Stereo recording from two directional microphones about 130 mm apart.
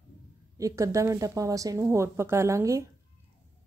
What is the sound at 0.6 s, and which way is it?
A woman's voice, 25° right (ahead or behind).